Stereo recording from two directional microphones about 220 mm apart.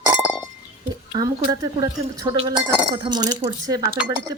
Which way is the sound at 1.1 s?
15° right (ahead or behind).